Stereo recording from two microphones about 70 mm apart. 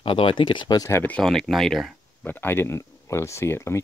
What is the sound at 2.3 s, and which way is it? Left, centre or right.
Speech, left.